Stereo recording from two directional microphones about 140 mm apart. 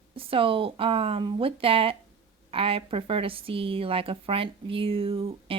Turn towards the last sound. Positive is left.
turn(degrees=-40)  # may be behind; listen again after turning